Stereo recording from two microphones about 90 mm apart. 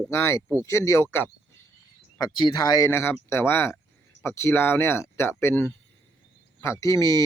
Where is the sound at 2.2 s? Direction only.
50° left (ahead or behind).